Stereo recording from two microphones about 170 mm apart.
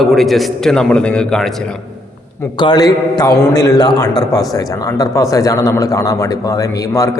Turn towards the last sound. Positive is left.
turn(degrees=20)  # may be behind; listen again after turning